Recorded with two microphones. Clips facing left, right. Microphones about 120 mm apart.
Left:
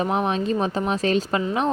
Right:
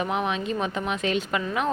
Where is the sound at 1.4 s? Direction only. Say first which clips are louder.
Left 4 dB; 25° left (ahead or behind).